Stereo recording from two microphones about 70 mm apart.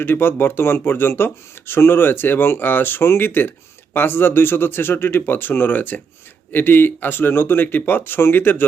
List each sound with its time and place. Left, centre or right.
0.0 s speech: left